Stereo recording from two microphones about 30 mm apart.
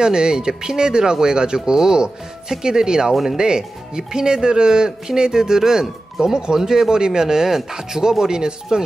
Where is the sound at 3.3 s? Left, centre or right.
Right.